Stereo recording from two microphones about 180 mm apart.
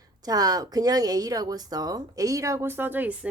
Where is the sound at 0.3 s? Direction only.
20° right (ahead or behind).